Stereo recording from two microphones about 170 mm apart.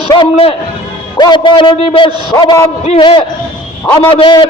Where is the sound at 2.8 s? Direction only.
30° left (ahead or behind).